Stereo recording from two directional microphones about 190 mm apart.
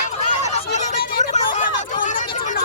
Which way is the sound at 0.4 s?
35° left (ahead or behind).